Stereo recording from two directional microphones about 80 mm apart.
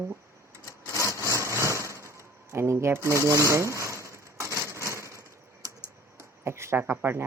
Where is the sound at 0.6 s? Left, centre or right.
Left.